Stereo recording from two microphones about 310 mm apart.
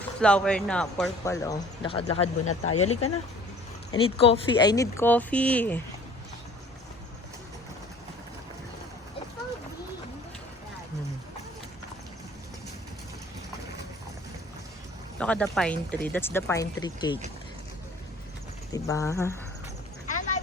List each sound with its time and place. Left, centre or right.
0.2 s speech: centre
2.4 s speech: left
3.9 s speech: centre
15.2 s speech: centre
18.7 s speech: centre
20.1 s a sound: left